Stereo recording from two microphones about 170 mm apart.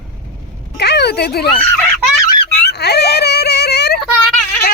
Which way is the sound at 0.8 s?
80° left.